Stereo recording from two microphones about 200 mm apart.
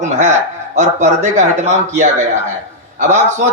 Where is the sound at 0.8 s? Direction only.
35° right (ahead or behind).